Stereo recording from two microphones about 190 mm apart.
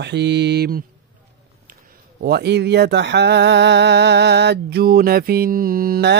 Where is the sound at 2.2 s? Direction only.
60° right (ahead or behind).